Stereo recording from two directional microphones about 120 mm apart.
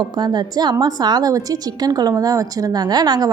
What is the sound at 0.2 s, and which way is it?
A woman's voice, 35° right (ahead or behind).